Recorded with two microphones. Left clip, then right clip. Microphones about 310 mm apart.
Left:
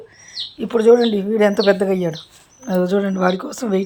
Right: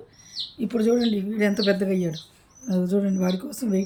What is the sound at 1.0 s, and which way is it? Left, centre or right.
Speech, left.